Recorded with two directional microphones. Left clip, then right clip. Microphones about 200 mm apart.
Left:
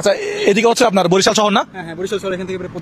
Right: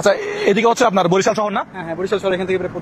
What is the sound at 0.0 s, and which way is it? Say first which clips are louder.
Speech: left 1 dB; 25° left (ahead or behind).